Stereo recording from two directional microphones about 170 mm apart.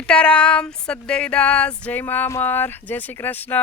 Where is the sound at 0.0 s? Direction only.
5° left (ahead or behind).